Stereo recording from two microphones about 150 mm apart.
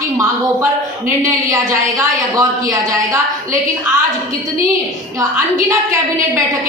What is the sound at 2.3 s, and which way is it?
Speech, 25° right (ahead or behind).